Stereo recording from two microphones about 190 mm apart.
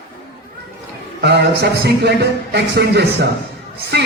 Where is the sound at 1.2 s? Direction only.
60° right (ahead or behind).